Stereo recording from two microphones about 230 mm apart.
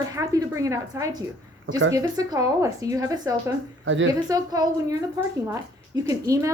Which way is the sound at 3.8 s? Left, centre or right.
Right.